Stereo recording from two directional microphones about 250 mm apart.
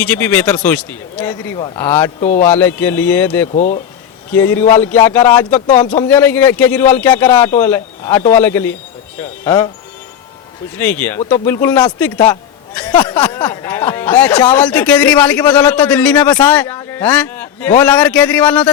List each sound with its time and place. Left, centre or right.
0.0 s a man's voice: centre
3.5 s speech: left
4.3 s a man's voice: centre
5.7 s speech: left
6.0 s a man's voice: centre
10.8 s a man's voice: centre
13.1 s speech: centre